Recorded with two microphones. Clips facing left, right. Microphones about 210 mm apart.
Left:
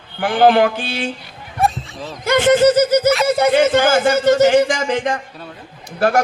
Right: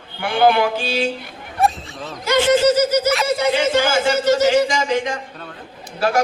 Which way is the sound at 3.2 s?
55° left (ahead or behind).